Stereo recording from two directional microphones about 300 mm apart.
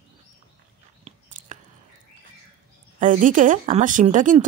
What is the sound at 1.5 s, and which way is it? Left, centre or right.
Chewing, right.